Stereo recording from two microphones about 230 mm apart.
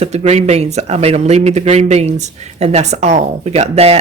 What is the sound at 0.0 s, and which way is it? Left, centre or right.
Speech, right.